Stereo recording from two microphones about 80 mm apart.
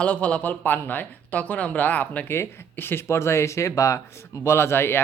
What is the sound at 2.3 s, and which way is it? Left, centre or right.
Speech, left.